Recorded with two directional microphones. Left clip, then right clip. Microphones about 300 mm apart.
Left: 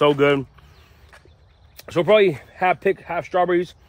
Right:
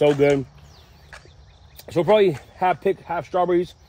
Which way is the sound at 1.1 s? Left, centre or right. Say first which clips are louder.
Right 6 dB; right.